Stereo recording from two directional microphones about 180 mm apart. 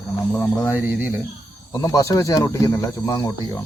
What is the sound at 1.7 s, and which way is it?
Speech, 20° left (ahead or behind).